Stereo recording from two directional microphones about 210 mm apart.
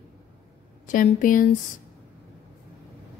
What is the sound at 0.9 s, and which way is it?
Speech, 40° left (ahead or behind).